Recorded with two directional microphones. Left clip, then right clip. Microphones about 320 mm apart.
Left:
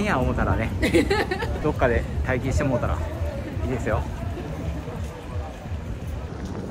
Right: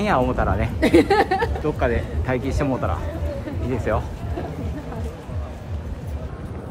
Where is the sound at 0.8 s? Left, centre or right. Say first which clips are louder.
Right 6 dB; right.